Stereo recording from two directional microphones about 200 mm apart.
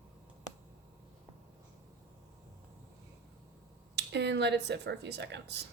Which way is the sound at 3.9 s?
60° right (ahead or behind).